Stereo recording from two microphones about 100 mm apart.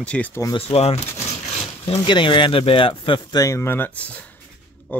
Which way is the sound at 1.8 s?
60° left (ahead or behind).